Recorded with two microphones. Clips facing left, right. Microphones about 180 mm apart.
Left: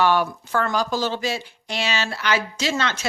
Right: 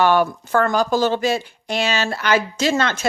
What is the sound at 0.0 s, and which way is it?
Speech, 50° right (ahead or behind).